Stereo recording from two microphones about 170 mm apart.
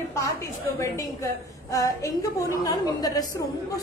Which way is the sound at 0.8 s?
20° left (ahead or behind).